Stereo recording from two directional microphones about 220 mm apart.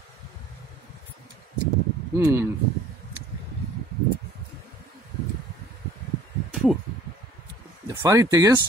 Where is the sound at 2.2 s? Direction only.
10° right (ahead or behind).